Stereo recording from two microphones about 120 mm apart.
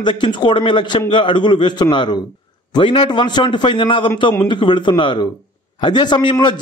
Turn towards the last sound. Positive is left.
turn(degrees=40)  # may be behind; listen again after turning